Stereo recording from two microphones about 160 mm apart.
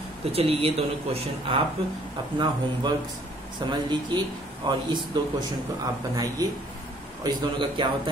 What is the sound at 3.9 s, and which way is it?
A man's voice, 30° right (ahead or behind).